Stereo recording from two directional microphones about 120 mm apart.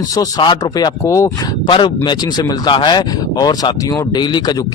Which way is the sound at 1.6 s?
45° left (ahead or behind).